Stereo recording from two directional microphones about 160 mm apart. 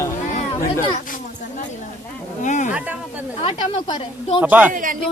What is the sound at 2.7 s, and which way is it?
Speech, 10° right (ahead or behind).